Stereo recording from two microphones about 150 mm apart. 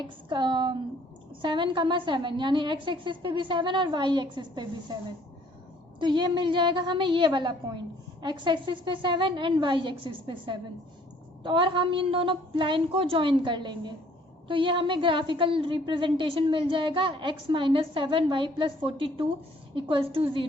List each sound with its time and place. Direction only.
0.0 s a woman's voice: 30° right (ahead or behind)
6.0 s a woman's voice: 30° right (ahead or behind)